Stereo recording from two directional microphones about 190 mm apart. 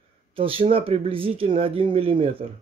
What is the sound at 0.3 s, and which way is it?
Speech, 30° right (ahead or behind).